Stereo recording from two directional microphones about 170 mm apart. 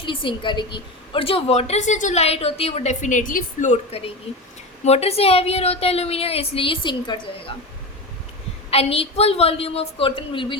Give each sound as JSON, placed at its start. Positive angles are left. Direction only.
{"t": 0.0, "sound": "a woman's voice", "side_deg": 30}
{"t": 8.7, "sound": "a woman's voice", "side_deg": 35}